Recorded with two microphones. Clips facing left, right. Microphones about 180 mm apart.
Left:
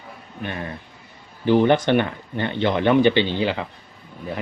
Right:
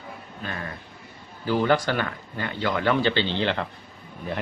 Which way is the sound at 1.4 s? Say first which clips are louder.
Left 6 dB; 20° left (ahead or behind).